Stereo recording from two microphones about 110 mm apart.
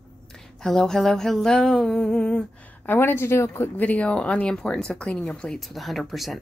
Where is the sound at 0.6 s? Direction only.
5° left (ahead or behind).